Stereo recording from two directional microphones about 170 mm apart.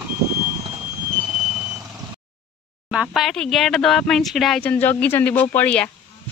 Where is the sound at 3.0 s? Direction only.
Centre (ahead or behind).